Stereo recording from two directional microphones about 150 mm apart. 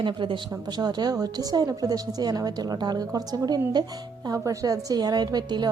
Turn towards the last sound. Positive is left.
turn(degrees=-25)  # may be behind; listen again after turning